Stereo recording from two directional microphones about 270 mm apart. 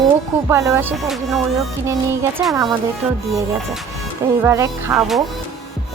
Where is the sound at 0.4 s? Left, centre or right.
Centre.